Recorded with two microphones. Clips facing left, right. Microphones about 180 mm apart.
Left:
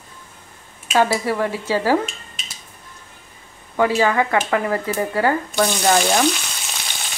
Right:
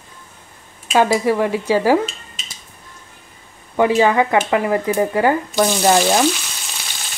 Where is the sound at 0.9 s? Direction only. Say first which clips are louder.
Right 3 dB; 15° right (ahead or behind).